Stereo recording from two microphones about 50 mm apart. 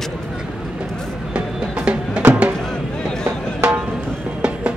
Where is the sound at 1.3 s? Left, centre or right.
Right.